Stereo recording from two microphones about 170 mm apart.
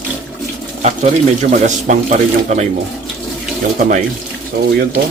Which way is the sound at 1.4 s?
45° right (ahead or behind).